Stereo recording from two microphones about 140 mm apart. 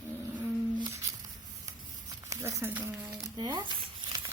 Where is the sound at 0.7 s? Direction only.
25° right (ahead or behind).